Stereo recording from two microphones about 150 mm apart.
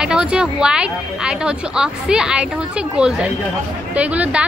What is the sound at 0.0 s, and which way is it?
Speech, 5° right (ahead or behind).